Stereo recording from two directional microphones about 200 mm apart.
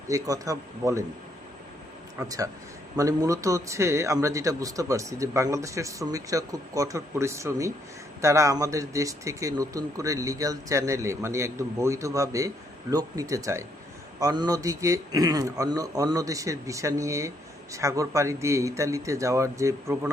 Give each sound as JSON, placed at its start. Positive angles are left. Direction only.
{"t": 0.1, "sound": "a man's voice", "side_deg": -15}
{"t": 2.1, "sound": "a man's voice", "side_deg": -15}